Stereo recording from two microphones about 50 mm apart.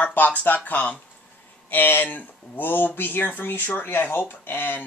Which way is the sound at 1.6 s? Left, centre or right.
Left.